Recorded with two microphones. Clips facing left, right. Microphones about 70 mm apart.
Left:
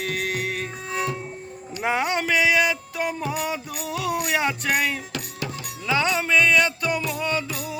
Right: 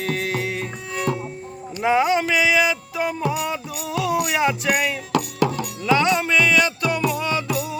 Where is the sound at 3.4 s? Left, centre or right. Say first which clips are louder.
Right 2 dB; centre.